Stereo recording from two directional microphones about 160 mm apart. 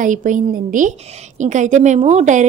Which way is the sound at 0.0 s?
55° right (ahead or behind).